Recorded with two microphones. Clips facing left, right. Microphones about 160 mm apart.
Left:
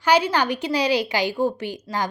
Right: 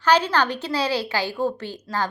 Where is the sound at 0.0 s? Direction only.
10° left (ahead or behind).